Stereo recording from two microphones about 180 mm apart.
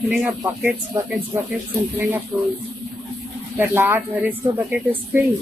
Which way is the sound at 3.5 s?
10° right (ahead or behind).